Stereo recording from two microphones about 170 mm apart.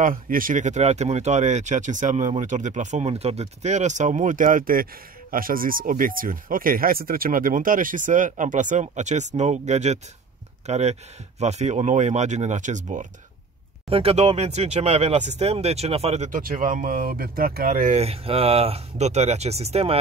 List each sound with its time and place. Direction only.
0.0 s speech: 55° right (ahead or behind)
13.8 s speech: 35° right (ahead or behind)
16.3 s speech: 55° right (ahead or behind)
17.9 s speech: 35° right (ahead or behind)